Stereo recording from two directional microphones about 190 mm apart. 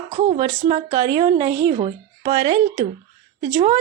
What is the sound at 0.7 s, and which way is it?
A woman's voice, 20° right (ahead or behind).